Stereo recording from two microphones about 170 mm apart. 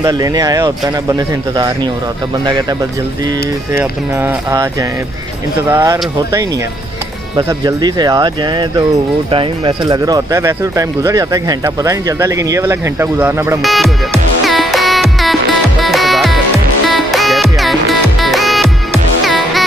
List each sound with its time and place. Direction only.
0.0 s speech: 20° right (ahead or behind)
3.7 s speech: 20° right (ahead or behind)
5.7 s speech: 20° right (ahead or behind)
13.6 s music: centre (ahead or behind)